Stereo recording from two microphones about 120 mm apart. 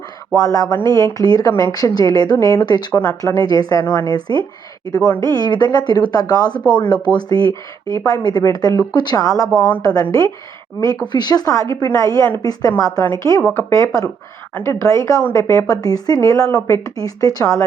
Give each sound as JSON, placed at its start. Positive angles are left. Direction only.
{"t": 0.3, "sound": "speech", "side_deg": 30}